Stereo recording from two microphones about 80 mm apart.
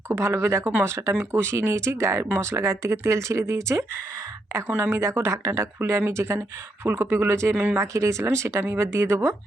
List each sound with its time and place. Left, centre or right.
0.1 s speech: right
7.5 s speech: right
7.8 s speech: right